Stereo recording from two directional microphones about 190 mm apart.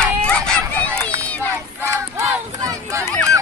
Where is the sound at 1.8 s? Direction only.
15° right (ahead or behind).